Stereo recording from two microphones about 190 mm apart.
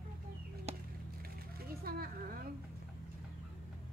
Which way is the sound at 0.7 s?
35° right (ahead or behind).